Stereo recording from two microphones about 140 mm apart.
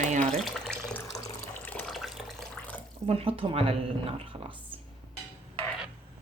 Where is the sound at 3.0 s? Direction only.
45° right (ahead or behind).